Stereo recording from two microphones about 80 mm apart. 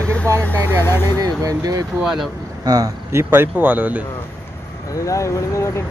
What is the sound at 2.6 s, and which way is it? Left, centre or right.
Speech, right.